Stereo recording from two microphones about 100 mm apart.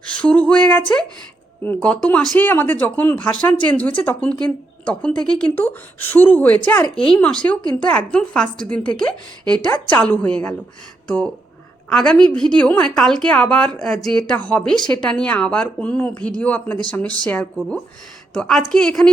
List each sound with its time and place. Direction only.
0.0 s a woman's voice: 10° left (ahead or behind)
11.9 s a woman's voice: 5° left (ahead or behind)
14.8 s speech: 40° left (ahead or behind)
15.0 s a woman's voice: 10° left (ahead or behind)